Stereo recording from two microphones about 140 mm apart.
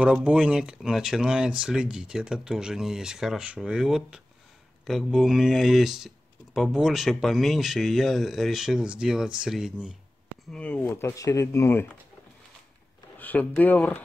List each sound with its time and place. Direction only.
0.0 s speech: 10° right (ahead or behind)
10.5 s speech: 10° left (ahead or behind)
10.9 s speech: 20° left (ahead or behind)
13.2 s speech: 10° left (ahead or behind)